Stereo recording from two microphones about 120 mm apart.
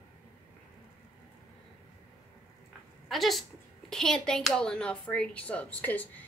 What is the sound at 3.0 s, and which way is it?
A woman's voice, centre (ahead or behind).